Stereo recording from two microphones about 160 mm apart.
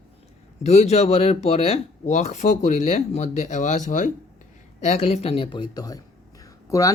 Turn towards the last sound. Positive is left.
turn(degrees=20)  # may be behind; listen again after turning